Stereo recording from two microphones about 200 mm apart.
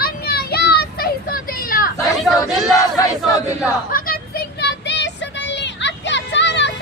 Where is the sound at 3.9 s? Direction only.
50° left (ahead or behind).